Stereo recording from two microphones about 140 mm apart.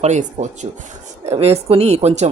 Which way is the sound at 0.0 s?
55° right (ahead or behind).